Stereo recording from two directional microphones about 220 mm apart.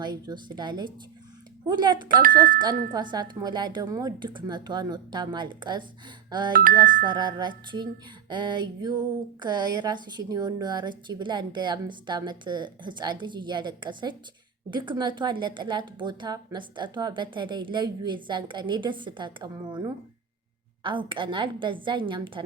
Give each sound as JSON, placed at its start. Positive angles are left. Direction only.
{"t": 0.0, "sound": "speech", "side_deg": -20}
{"t": 2.2, "sound": "speech", "side_deg": -40}
{"t": 2.6, "sound": "speech", "side_deg": -20}
{"t": 6.5, "sound": "speech", "side_deg": -40}
{"t": 7.0, "sound": "speech", "side_deg": -20}